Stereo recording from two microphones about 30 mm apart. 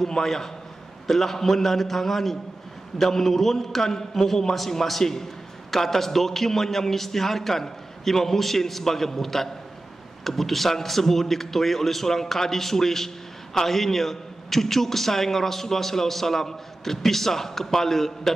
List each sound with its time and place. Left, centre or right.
0.0 s a man's voice: centre